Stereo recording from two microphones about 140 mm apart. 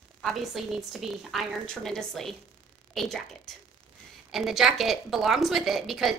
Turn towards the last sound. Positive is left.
turn(degrees=0)  # may be behind; listen again after turning